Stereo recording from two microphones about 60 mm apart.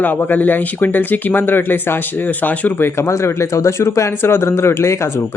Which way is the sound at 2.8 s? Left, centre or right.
Left.